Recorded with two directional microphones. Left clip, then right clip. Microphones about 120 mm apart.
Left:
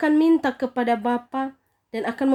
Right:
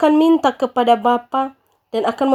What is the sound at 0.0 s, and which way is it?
Speech, 40° right (ahead or behind).